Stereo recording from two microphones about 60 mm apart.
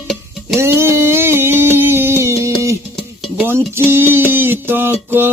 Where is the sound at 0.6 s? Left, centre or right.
Right.